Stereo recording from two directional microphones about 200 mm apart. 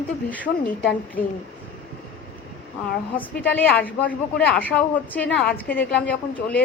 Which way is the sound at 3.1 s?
10° left (ahead or behind).